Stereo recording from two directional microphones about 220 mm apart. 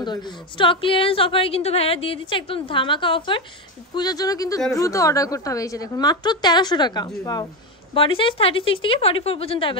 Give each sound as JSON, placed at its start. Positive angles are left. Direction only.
{"t": 0.0, "sound": "a woman's voice", "side_deg": 20}